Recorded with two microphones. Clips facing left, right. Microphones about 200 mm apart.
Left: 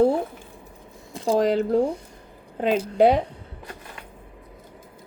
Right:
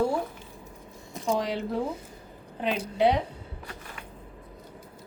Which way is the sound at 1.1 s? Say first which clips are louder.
Left 5 dB; 30° left (ahead or behind).